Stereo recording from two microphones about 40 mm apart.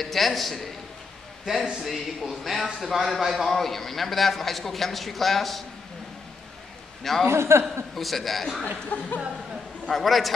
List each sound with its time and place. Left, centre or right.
0.0 s a man's voice: centre
1.4 s a man's voice: centre
3.4 s a man's voice: centre
7.0 s a man's voice: centre
7.2 s a man's voice: right
7.6 s a man's voice: centre
8.9 s a sound: left
9.8 s a man's voice: centre